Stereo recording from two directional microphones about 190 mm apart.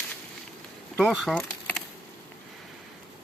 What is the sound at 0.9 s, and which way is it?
Speech, centre (ahead or behind).